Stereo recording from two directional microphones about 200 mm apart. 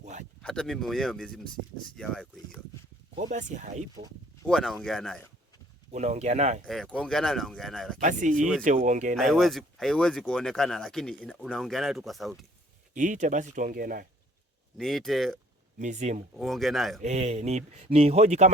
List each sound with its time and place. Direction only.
0.0 s a sound: 35° right (ahead or behind)
0.4 s speech: 5° left (ahead or behind)
3.2 s speech: 40° right (ahead or behind)
4.4 s speech: centre (ahead or behind)
5.9 s speech: 35° right (ahead or behind)
6.7 s speech: centre (ahead or behind)
8.0 s speech: 40° right (ahead or behind)
9.1 s speech: centre (ahead or behind)
12.9 s speech: 40° right (ahead or behind)
14.8 s speech: centre (ahead or behind)
15.8 s speech: 35° right (ahead or behind)
16.4 s speech: centre (ahead or behind)
17.0 s speech: 35° right (ahead or behind)